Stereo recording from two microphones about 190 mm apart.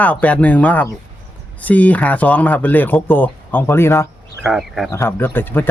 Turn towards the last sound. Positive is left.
turn(degrees=10)  # may be behind; listen again after turning